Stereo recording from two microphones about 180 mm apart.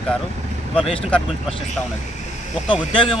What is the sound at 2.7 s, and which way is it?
Speech, 25° left (ahead or behind).